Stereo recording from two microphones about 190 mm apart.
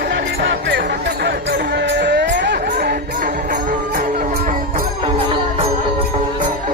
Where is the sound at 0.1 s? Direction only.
65° right (ahead or behind).